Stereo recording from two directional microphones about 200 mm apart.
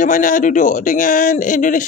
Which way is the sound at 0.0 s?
40° left (ahead or behind).